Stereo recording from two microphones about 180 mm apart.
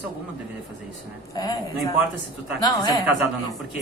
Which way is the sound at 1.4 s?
20° left (ahead or behind).